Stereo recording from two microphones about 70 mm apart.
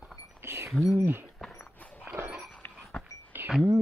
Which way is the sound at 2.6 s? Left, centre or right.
Left.